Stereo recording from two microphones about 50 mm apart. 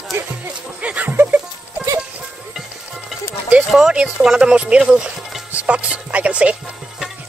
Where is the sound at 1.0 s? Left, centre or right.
Right.